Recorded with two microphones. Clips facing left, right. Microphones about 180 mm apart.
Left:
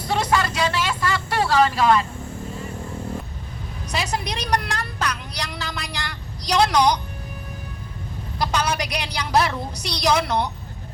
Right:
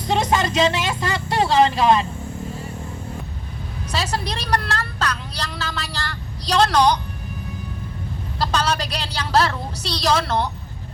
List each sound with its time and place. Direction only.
0.1 s a sound: 20° right (ahead or behind)
3.9 s a woman's voice: 15° left (ahead or behind)
8.4 s a woman's voice: 15° left (ahead or behind)